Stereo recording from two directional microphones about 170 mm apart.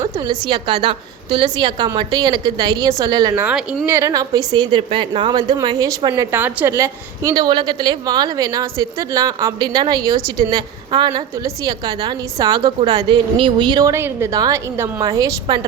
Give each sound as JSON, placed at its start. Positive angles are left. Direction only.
{"t": 0.0, "sound": "a woman's voice", "side_deg": -25}
{"t": 3.3, "sound": "speech", "side_deg": -5}
{"t": 3.8, "sound": "a woman's voice", "side_deg": -15}
{"t": 6.3, "sound": "a woman's voice", "side_deg": -10}